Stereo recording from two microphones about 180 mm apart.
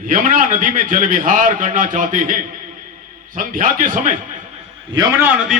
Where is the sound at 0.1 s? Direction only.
45° right (ahead or behind).